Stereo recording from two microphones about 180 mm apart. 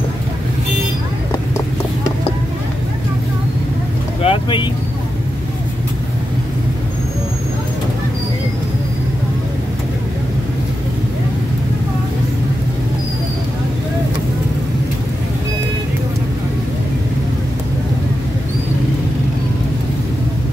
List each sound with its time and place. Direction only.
4.2 s boat: 30° left (ahead or behind)